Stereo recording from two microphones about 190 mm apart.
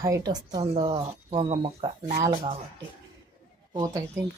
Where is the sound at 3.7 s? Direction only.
20° right (ahead or behind).